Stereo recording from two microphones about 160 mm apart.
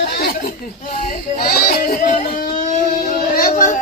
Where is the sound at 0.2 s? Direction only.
65° left (ahead or behind).